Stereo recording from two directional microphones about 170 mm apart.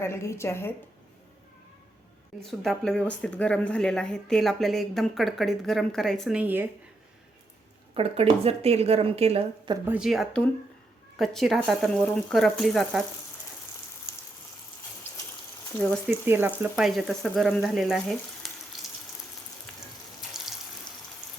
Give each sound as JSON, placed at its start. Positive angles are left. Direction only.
{"t": 0.0, "sound": "a woman's voice", "side_deg": 15}
{"t": 2.4, "sound": "speech", "side_deg": 0}
{"t": 7.9, "sound": "a woman's voice", "side_deg": -35}
{"t": 9.9, "sound": "speech", "side_deg": 0}
{"t": 15.1, "sound": "water", "side_deg": 10}
{"t": 15.8, "sound": "a woman's voice", "side_deg": 5}
{"t": 16.2, "sound": "speech", "side_deg": -10}
{"t": 19.7, "sound": "water tap", "side_deg": 5}